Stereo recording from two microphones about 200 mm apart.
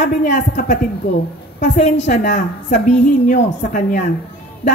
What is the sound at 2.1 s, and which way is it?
A woman's voice, 45° left (ahead or behind).